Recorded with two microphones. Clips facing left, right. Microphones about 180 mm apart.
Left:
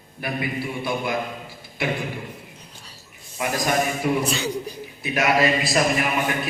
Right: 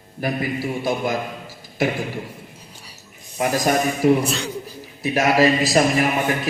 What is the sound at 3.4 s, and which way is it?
A man's voice, 40° right (ahead or behind).